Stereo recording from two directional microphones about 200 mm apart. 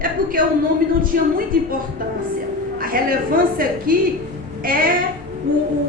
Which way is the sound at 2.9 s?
45° right (ahead or behind).